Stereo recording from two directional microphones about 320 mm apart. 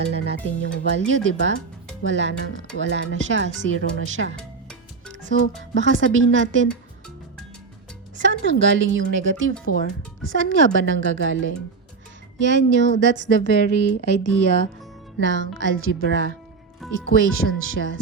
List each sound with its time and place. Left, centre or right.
0.6 s speech: right
5.7 s speech: right
8.1 s speech: right